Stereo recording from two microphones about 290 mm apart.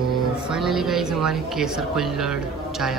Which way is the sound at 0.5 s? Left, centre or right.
Centre.